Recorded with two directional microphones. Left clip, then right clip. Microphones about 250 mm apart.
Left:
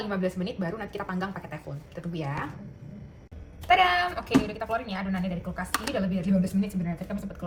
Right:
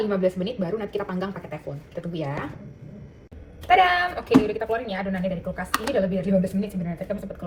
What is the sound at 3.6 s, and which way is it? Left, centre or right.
A woman's voice, centre.